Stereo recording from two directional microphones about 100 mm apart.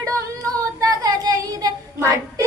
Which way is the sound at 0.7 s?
40° right (ahead or behind).